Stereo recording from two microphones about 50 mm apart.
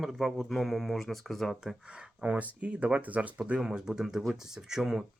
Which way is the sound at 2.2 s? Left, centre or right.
Right.